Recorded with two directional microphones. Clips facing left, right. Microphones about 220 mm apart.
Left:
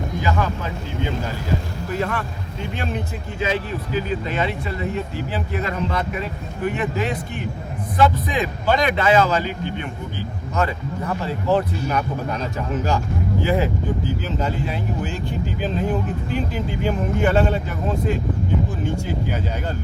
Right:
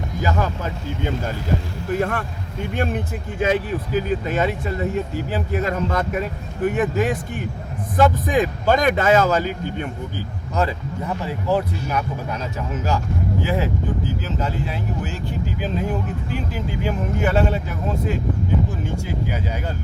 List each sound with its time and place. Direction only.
0.2 s speech: 45° right (ahead or behind)
1.9 s speech: 50° right (ahead or behind)
10.5 s speech: 35° right (ahead or behind)
11.0 s a man's voice: 10° right (ahead or behind)